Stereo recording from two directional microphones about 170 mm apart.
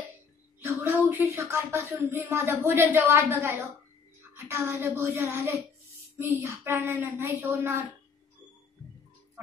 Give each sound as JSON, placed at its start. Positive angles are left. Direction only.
{"t": 0.6, "sound": "a woman's voice", "side_deg": -15}